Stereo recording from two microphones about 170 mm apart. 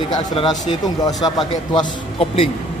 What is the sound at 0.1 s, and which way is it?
Speech, 25° left (ahead or behind).